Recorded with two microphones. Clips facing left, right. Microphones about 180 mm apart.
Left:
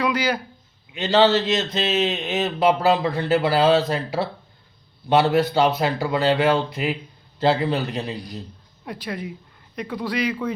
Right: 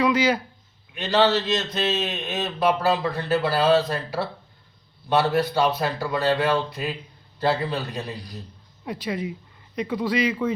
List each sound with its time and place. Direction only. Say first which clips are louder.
0.0 s speech: right 2 dB; 5° right (ahead or behind)
0.9 s a man's voice: left 3 dB; 25° left (ahead or behind)
8.8 s speech: right 2 dB; centre (ahead or behind)